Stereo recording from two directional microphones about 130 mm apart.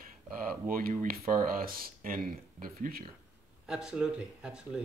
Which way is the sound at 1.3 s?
90° right.